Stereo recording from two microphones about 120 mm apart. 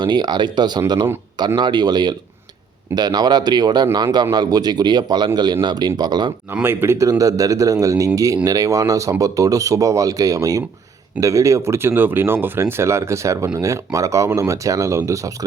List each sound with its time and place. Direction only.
0.0 s a man's voice: 35° right (ahead or behind)
6.5 s speech: 15° right (ahead or behind)